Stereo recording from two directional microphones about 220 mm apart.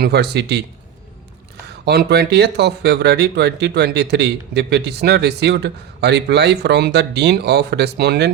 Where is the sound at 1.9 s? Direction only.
45° right (ahead or behind).